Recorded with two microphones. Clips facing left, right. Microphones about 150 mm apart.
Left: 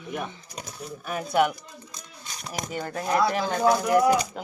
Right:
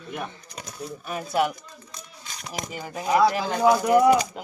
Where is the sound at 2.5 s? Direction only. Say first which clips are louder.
Left 2 dB; centre (ahead or behind).